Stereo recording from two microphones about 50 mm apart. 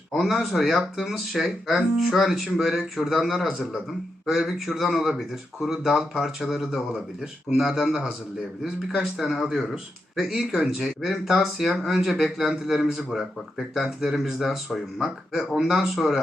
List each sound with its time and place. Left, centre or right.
0.1 s speech: centre